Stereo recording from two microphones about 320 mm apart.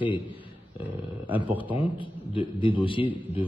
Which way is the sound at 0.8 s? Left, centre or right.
Centre.